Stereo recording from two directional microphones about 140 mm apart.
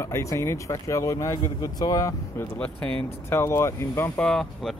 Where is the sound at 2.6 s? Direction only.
10° left (ahead or behind).